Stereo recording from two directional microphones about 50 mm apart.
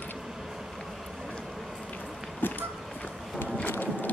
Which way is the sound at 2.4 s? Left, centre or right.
Left.